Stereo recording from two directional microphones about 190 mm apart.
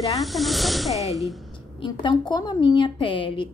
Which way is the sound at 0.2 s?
Centre (ahead or behind).